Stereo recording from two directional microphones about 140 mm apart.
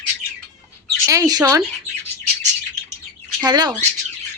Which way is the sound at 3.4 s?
30° right (ahead or behind).